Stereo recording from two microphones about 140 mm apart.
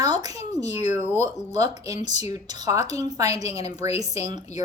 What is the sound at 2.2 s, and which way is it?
Speech, 25° right (ahead or behind).